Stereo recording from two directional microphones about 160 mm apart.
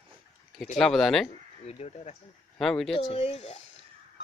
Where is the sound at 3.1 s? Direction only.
40° left (ahead or behind).